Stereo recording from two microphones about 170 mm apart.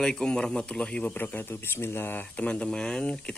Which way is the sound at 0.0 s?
5° left (ahead or behind).